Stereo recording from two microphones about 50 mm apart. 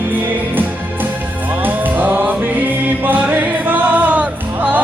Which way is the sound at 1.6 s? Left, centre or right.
Right.